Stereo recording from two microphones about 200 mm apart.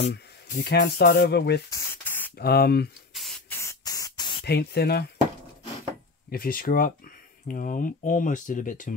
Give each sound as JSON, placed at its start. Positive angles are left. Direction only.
{"t": 0.5, "sound": "speech", "side_deg": 40}
{"t": 1.7, "sound": "spray", "side_deg": 15}
{"t": 2.3, "sound": "speech", "side_deg": 50}
{"t": 3.2, "sound": "spray", "side_deg": 0}
{"t": 4.5, "sound": "speech", "side_deg": 55}
{"t": 6.3, "sound": "speech", "side_deg": 45}